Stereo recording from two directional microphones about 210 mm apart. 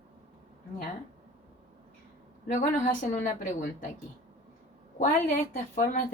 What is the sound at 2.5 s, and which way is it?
Speech, 35° left (ahead or behind).